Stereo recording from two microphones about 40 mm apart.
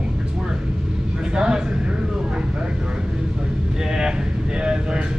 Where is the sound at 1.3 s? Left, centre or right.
Right.